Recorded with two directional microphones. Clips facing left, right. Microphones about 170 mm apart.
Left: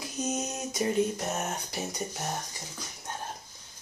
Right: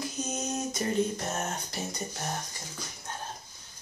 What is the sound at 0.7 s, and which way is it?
Speech, 10° left (ahead or behind).